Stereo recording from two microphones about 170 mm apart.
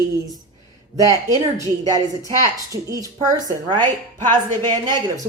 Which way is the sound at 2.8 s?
20° right (ahead or behind).